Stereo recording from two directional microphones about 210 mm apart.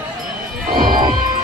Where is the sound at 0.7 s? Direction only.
20° right (ahead or behind).